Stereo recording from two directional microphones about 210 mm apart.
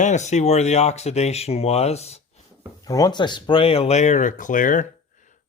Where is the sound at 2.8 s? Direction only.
15° left (ahead or behind); by 4.8 s 40° left (ahead or behind).